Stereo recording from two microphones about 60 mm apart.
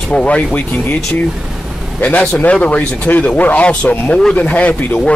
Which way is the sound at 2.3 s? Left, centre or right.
Left.